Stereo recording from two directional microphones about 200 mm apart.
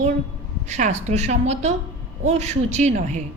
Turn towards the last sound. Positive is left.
turn(degrees=-35)  # may be behind; listen again after turning